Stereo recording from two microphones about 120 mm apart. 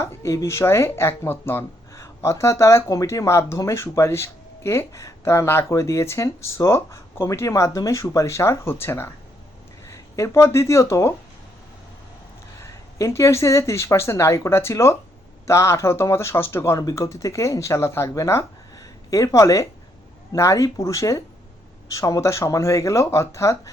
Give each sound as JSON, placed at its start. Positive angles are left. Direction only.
{"t": 0.0, "sound": "speech", "side_deg": 25}
{"t": 12.5, "sound": "speech", "side_deg": 25}